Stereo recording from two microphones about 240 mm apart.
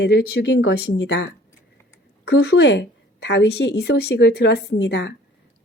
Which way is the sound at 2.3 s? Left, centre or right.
Left.